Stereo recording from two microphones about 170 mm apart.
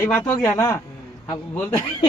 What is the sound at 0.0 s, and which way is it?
Speech, 10° left (ahead or behind).